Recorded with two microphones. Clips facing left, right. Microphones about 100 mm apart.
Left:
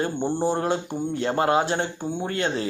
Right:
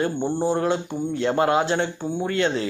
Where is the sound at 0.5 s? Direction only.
45° left (ahead or behind).